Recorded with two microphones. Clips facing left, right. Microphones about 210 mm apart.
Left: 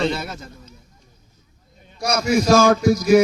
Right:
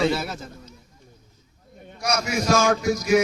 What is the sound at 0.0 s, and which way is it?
Speech, 5° right (ahead or behind).